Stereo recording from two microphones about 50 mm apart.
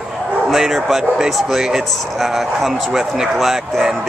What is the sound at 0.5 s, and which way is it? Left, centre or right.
Speech, centre.